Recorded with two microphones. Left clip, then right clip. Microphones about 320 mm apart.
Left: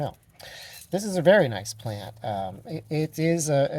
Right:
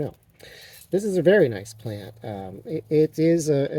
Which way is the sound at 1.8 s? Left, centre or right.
Left.